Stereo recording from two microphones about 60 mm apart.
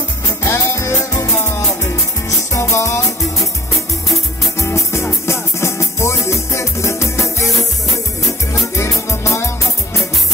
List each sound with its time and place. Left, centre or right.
0.4 s music: left
0.7 s music: left
1.3 s music: left
2.2 s music: left
4.6 s music: left
9.1 s music: left